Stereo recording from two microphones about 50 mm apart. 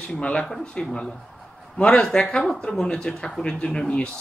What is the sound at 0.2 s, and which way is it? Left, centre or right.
Speech, left.